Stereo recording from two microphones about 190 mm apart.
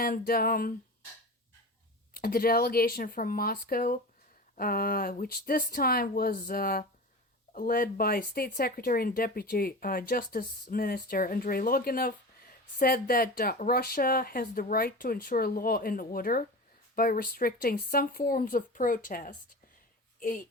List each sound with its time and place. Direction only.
0.0 s speech: 50° left (ahead or behind)
2.1 s a woman's voice: 50° left (ahead or behind)